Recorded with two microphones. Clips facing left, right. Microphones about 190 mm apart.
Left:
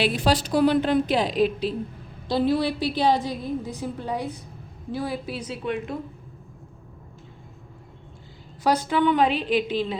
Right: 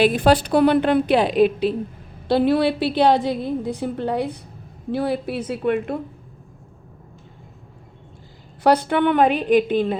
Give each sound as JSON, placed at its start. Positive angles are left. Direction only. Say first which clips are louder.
{"t": 0.0, "sound": "a woman's voice", "louder": "right 6 dB", "side_deg": -55}
{"t": 8.6, "sound": "a woman's voice", "louder": "right 4 dB", "side_deg": -60}